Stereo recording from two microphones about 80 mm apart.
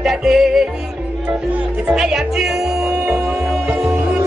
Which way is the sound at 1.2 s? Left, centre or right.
Right.